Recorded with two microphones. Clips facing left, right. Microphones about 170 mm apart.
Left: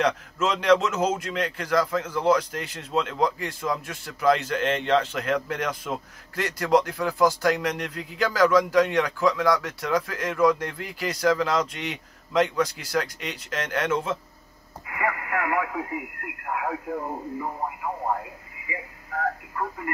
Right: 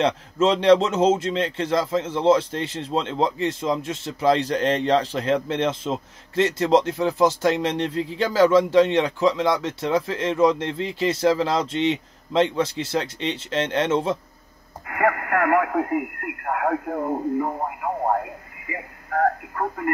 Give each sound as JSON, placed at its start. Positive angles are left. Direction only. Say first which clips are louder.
{"t": 0.0, "sound": "a man's voice", "louder": "right 4 dB", "side_deg": -30}
{"t": 14.9, "sound": "speech", "louder": "right 6 dB", "side_deg": -55}
{"t": 18.7, "sound": "radio", "louder": "right 5 dB", "side_deg": -55}